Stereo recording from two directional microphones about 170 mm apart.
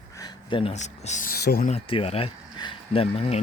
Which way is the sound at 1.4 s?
70° left (ahead or behind).